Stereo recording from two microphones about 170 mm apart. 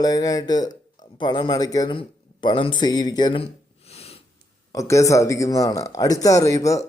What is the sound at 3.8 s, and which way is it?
Snort, 35° left (ahead or behind).